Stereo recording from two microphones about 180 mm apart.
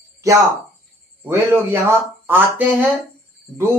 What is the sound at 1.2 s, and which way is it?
Speech, 15° right (ahead or behind).